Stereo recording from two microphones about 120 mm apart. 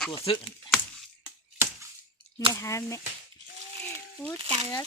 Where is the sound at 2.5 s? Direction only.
25° left (ahead or behind).